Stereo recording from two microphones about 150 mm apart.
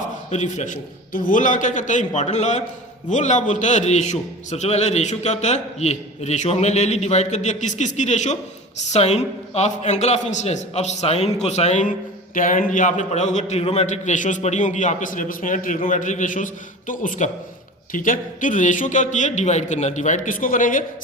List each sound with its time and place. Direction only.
0.0 s a man's voice: 55° left (ahead or behind)